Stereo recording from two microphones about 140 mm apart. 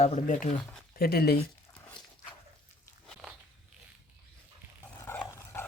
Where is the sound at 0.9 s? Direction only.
90° left.